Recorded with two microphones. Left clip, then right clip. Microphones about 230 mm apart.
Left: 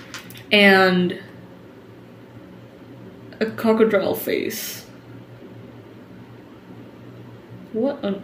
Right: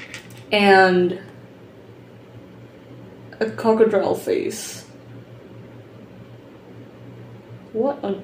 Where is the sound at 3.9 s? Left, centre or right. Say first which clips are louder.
Right 1 dB; left.